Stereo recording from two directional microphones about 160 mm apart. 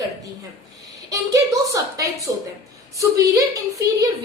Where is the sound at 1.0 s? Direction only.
20° right (ahead or behind).